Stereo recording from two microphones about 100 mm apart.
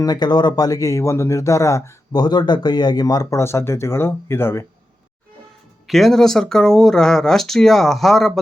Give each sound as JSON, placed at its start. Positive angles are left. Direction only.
{"t": 0.0, "sound": "speech", "side_deg": 45}
{"t": 2.1, "sound": "speech", "side_deg": 45}
{"t": 5.9, "sound": "speech", "side_deg": 0}